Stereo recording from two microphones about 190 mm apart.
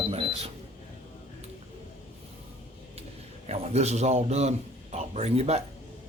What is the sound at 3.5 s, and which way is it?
Speech, 35° right (ahead or behind).